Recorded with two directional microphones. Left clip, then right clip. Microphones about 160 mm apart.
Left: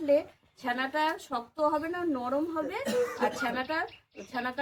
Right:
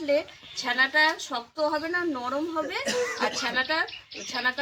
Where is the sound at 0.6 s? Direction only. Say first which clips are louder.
Right 7 dB; centre (ahead or behind).